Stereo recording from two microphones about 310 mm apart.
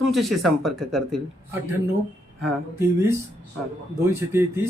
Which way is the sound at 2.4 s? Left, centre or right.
Centre.